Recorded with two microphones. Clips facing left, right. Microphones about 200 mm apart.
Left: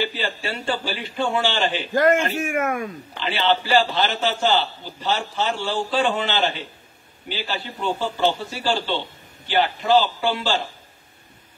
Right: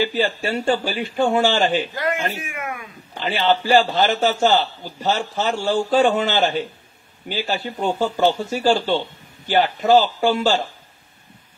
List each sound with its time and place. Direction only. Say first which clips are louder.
0.0 s a man's voice: right 5 dB; 45° right (ahead or behind)
2.0 s speech: left 6 dB; 50° left (ahead or behind)
3.2 s a man's voice: right 2 dB; 45° right (ahead or behind)